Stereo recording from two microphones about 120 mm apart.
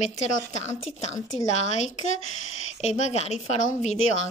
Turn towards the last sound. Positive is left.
turn(degrees=80)